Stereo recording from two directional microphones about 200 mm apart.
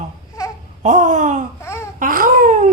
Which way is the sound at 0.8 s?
35° right (ahead or behind).